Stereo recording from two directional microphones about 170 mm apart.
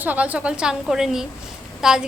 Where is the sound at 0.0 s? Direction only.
10° right (ahead or behind).